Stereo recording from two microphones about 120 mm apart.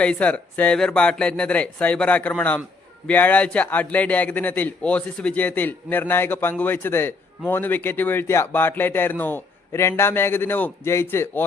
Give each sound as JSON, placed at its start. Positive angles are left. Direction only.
{"t": 0.0, "sound": "a man's voice", "side_deg": 10}